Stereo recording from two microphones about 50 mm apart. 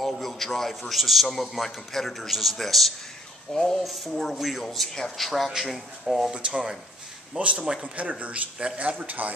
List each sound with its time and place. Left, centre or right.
0.0 s a man's voice: centre
3.8 s a man's voice: centre
7.3 s speech: right